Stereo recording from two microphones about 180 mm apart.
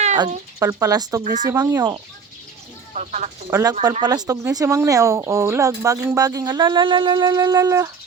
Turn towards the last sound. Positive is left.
turn(degrees=-20)  # may be behind; listen again after turning